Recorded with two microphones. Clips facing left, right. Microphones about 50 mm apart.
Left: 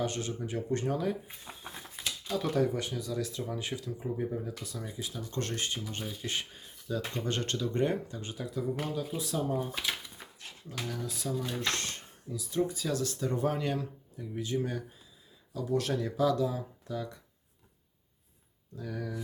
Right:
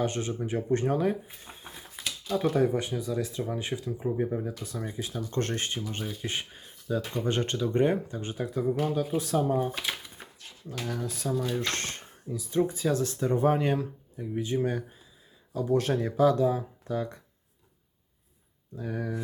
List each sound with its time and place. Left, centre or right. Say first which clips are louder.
0.0 s speech: right 4 dB; right
5.9 s speech: right 3 dB; right
9.4 s speech: right 3 dB; right
10.2 s a sound: right 2 dB; right
10.8 s speech: right 5 dB; right
18.8 s speech: right 5 dB; right